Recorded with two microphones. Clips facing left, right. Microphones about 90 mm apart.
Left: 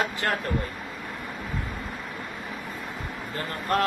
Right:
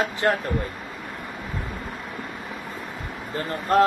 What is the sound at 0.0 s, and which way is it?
Speech, 20° right (ahead or behind).